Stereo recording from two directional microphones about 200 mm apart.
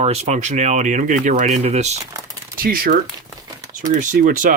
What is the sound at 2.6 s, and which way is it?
Speech, 45° right (ahead or behind).